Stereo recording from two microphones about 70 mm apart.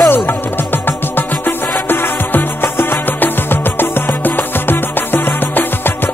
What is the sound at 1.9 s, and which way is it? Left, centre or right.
Music, left.